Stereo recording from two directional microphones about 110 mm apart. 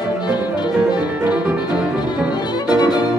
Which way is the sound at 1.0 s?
10° right (ahead or behind).